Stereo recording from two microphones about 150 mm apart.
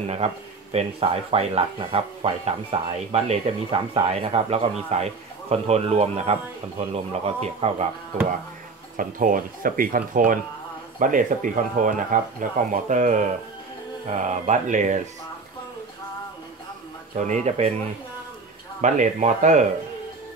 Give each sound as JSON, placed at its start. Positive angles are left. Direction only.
{"t": 0.0, "sound": "speech", "side_deg": -45}
{"t": 8.9, "sound": "speech", "side_deg": -65}
{"t": 17.2, "sound": "speech", "side_deg": -50}
{"t": 18.8, "sound": "speech", "side_deg": -55}